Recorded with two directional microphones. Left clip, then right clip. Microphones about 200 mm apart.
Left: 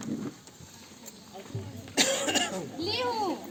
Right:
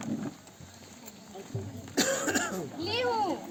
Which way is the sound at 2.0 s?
45° right (ahead or behind).